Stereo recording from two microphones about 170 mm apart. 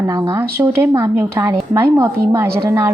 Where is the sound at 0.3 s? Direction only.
15° right (ahead or behind).